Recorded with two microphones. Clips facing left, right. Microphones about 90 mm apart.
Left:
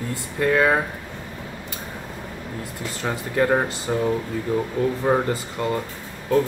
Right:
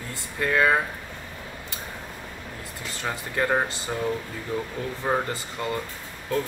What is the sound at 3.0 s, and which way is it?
Speech, 5° left (ahead or behind).